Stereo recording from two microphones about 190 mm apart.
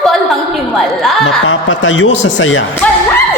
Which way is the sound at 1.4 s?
90° left.